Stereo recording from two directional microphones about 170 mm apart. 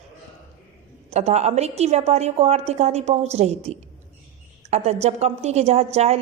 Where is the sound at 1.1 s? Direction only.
40° right (ahead or behind).